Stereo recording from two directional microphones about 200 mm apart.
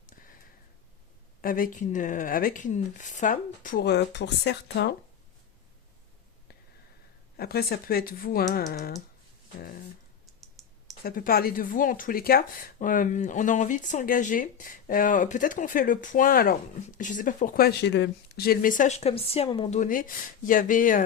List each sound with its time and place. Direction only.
1.4 s speech: 45° left (ahead or behind)
7.3 s speech: 50° left (ahead or behind)
10.4 s typing: centre (ahead or behind)
11.0 s speech: 45° left (ahead or behind)